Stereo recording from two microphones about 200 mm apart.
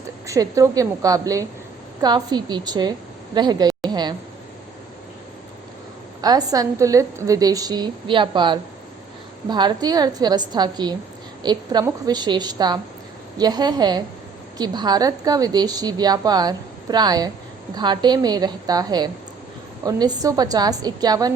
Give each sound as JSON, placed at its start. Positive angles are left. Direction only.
{"t": 0.3, "sound": "a woman's voice", "side_deg": -15}
{"t": 6.2, "sound": "a woman's voice", "side_deg": -20}